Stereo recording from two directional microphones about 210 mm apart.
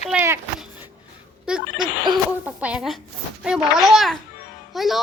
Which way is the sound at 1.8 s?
20° right (ahead or behind).